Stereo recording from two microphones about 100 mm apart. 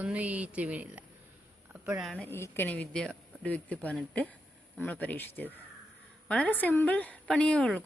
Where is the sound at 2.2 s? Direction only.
20° left (ahead or behind).